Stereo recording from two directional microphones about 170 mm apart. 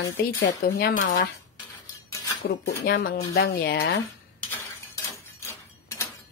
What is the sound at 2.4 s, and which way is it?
Speech, 65° left (ahead or behind).